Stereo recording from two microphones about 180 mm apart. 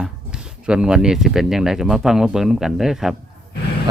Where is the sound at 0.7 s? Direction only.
5° right (ahead or behind).